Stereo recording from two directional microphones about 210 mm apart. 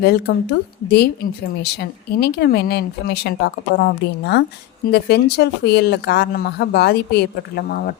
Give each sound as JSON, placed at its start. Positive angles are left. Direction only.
{"t": 0.0, "sound": "speech", "side_deg": 50}
{"t": 4.9, "sound": "speech", "side_deg": 50}